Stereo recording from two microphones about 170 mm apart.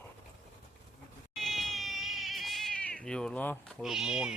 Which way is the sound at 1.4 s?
Centre (ahead or behind).